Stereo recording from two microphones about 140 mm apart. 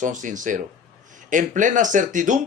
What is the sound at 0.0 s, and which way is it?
Speech, 65° right (ahead or behind).